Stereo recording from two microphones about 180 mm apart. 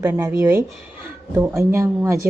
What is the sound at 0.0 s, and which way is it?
A woman's voice, 15° right (ahead or behind).